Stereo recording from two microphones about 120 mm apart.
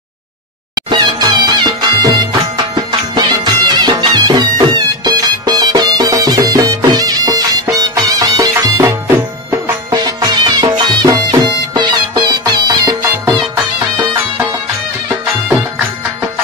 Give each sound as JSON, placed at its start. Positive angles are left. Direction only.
{"t": 0.8, "sound": "music", "side_deg": -35}
{"t": 9.9, "sound": "music", "side_deg": -35}